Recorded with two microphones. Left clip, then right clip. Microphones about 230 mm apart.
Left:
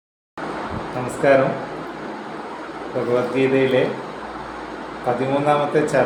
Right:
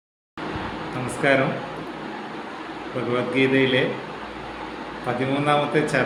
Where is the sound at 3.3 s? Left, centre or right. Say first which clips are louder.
Even; centre.